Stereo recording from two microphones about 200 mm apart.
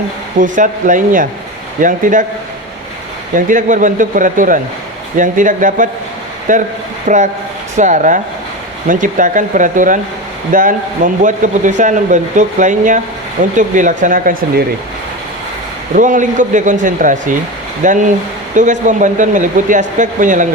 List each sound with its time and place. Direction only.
0.3 s speech: 40° right (ahead or behind)
3.3 s speech: 40° right (ahead or behind)
16.0 s speech: 40° right (ahead or behind)